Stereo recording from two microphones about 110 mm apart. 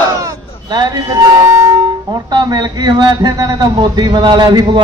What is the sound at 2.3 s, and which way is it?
A man's voice, 40° right (ahead or behind).